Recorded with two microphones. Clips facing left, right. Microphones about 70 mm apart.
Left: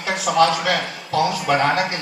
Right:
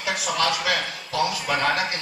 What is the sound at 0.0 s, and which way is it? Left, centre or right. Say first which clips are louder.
A man's voice: left 7 dB; left.